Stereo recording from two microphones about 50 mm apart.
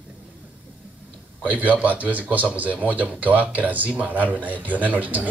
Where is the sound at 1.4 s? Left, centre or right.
Right.